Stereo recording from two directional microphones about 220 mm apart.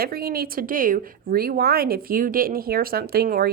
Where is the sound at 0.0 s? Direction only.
45° right (ahead or behind).